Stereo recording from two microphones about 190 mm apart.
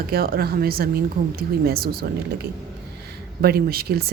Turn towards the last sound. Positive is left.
turn(degrees=-55)  # may be behind; listen again after turning